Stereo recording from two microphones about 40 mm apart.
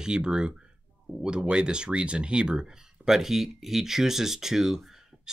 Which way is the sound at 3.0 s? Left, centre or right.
Centre.